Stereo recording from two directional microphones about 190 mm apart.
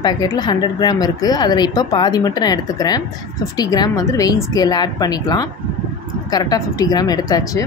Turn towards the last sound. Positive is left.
turn(degrees=20)  # may be behind; listen again after turning